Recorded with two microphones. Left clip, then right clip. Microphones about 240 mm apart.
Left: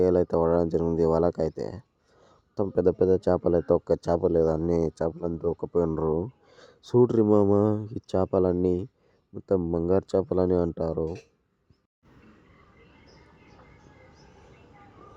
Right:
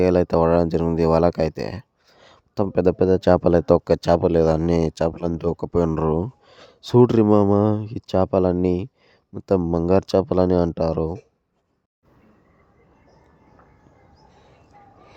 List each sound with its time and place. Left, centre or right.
0.0 s speech: right
4.7 s speech: right
5.5 s speech: right
5.8 s speech: right
6.1 s speech: right